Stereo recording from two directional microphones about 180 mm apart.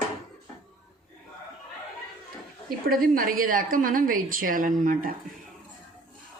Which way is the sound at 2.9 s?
50° right (ahead or behind).